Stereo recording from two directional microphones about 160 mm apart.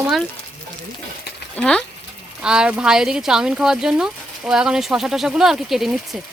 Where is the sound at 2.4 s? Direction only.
5° right (ahead or behind).